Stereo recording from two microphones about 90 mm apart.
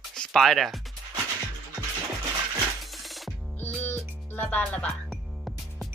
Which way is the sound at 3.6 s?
25° left (ahead or behind).